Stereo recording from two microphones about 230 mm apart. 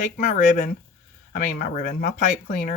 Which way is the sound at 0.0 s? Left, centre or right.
Left.